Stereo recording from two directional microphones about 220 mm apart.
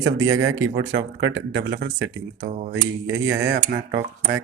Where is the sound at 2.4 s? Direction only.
35° right (ahead or behind).